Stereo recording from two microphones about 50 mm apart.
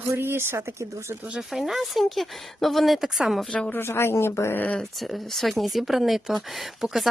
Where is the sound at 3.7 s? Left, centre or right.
Left.